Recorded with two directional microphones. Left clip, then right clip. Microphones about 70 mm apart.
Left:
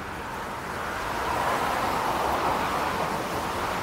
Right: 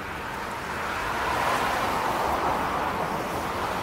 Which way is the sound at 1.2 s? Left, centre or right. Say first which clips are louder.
Right 1 dB; right.